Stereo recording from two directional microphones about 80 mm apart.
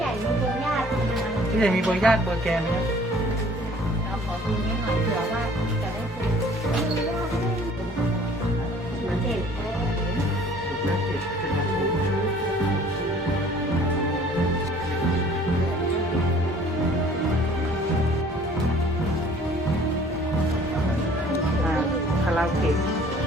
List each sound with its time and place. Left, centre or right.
1.6 s music: centre
22.3 s music: centre